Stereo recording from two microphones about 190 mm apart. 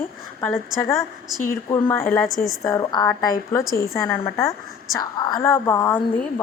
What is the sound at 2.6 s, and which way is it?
A woman's voice, 20° left (ahead or behind).